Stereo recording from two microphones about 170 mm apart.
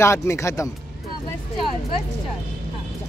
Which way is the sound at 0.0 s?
15° left (ahead or behind).